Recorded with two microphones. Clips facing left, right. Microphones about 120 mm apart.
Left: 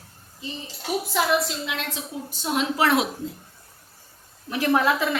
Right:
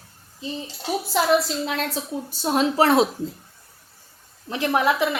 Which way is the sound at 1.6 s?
40° right (ahead or behind).